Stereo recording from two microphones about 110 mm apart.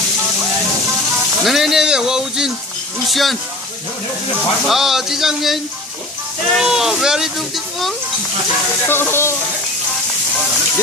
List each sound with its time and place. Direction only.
1.5 s speech: 5° right (ahead or behind)
4.7 s speech: 5° right (ahead or behind)
6.6 s speech: 5° right (ahead or behind)
8.9 s speech: 20° left (ahead or behind)